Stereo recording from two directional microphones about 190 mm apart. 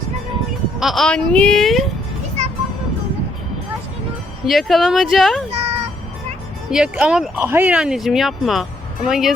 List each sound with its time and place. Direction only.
0.8 s speech: centre (ahead or behind)
4.4 s speech: centre (ahead or behind)
5.5 s a sound: 35° right (ahead or behind)
6.7 s speech: 5° right (ahead or behind)